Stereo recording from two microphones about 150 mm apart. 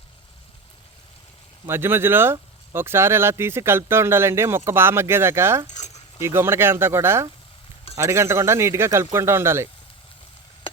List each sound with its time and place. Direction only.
1.6 s speech: 15° right (ahead or behind)